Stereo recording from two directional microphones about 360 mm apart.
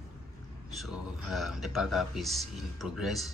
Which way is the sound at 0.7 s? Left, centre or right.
Centre.